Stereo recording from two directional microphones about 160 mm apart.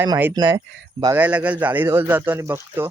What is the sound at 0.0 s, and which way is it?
Speech, 15° right (ahead or behind).